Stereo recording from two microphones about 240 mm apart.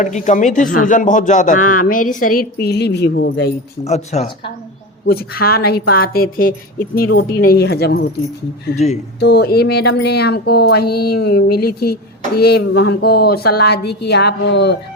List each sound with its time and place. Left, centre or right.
0.0 s speech: left
3.8 s speech: left
5.0 s speech: left
8.7 s speech: left
9.2 s a woman's voice: left